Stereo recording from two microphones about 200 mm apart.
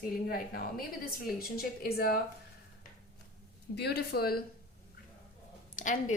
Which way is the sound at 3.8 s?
55° left (ahead or behind).